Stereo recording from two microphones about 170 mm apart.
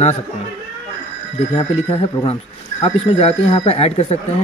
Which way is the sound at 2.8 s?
35° left (ahead or behind).